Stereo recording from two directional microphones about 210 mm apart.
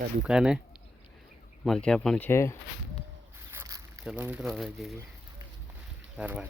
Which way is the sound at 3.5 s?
10° right (ahead or behind).